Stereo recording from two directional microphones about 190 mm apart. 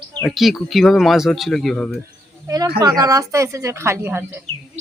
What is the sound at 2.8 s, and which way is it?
Speech, 20° right (ahead or behind).